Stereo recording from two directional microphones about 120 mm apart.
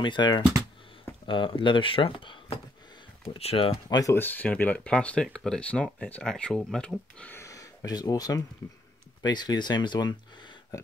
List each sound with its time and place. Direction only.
0.0 s speech: 40° left (ahead or behind)
4.1 s speech: 15° left (ahead or behind)
7.3 s a sound: 25° left (ahead or behind)
9.2 s speech: 35° left (ahead or behind)